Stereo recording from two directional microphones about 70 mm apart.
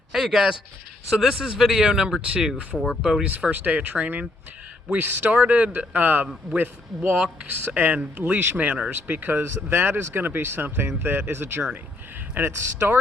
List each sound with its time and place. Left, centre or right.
0.1 s speech: centre
3.5 s speech: right